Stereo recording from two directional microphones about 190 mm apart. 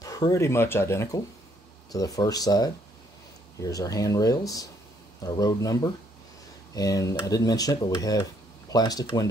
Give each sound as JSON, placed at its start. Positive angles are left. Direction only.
{"t": 0.0, "sound": "speech", "side_deg": 20}